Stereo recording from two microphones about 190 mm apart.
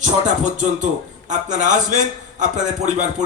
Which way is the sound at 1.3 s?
40° right (ahead or behind).